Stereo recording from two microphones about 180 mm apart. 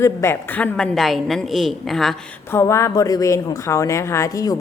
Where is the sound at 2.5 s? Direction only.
15° left (ahead or behind).